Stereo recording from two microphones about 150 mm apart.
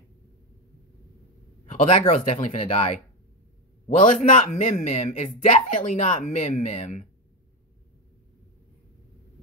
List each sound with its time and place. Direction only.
1.7 s speech: 50° left (ahead or behind)